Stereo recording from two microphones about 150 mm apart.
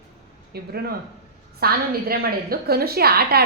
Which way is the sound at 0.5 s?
90° right.